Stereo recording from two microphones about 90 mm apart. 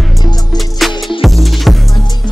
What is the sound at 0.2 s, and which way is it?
Music, 50° left (ahead or behind).